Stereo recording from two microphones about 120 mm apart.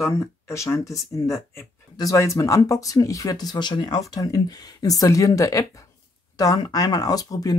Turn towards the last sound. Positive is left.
turn(degrees=30)  # may be behind; listen again after turning